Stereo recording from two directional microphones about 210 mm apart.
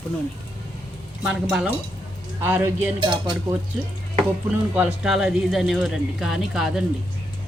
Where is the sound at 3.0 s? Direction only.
20° right (ahead or behind).